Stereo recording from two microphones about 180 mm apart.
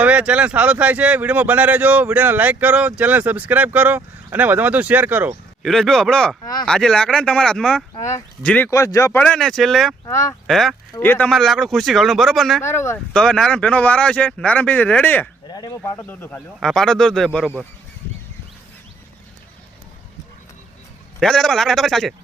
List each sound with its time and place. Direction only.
0.0 s speech: 5° right (ahead or behind)
5.6 s speech: centre (ahead or behind)
6.4 s speech: 20° left (ahead or behind)
6.7 s speech: 5° left (ahead or behind)
7.9 s speech: 15° left (ahead or behind); by 10.8 s centre (ahead or behind)
10.9 s speech: 10° left (ahead or behind)
12.6 s speech: 15° left (ahead or behind)
13.1 s speech: 5° left (ahead or behind)
15.4 s speech: 25° left (ahead or behind); by 17.7 s 5° right (ahead or behind)
21.2 s speech: 5° left (ahead or behind)